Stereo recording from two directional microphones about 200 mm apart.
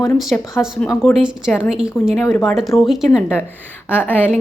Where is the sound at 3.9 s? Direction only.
10° left (ahead or behind).